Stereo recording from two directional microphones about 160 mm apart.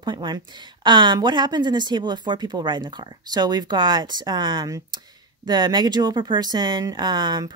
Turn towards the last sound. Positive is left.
turn(degrees=-25)  # may be behind; listen again after turning